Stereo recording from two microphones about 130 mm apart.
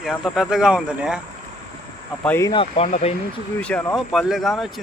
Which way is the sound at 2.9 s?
65° left (ahead or behind).